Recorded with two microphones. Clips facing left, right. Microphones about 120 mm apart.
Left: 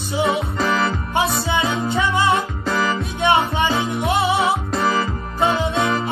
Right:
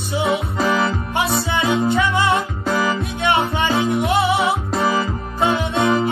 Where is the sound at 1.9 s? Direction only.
25° left (ahead or behind).